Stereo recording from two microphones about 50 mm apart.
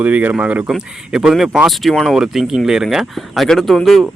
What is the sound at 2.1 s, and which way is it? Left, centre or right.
Speech, centre.